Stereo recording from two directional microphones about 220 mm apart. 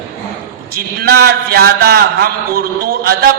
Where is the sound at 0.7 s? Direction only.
45° right (ahead or behind).